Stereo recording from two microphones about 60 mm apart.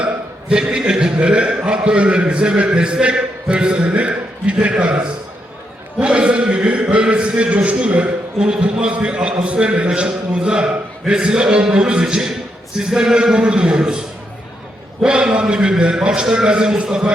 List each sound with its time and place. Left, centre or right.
0.0 s a man's voice: centre
15.0 s a man's voice: centre